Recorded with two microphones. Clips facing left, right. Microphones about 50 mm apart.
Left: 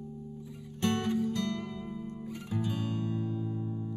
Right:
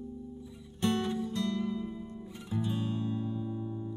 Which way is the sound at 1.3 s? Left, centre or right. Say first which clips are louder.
Right 2 dB; left.